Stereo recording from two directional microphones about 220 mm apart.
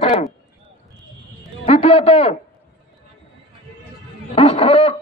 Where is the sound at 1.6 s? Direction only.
30° left (ahead or behind).